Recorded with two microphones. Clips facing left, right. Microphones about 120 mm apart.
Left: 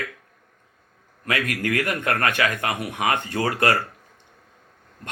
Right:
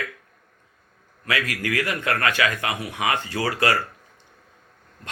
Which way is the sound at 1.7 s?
45° left (ahead or behind).